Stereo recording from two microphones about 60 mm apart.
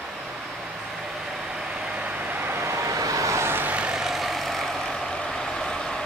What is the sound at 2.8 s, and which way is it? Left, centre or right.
Vehicle, right.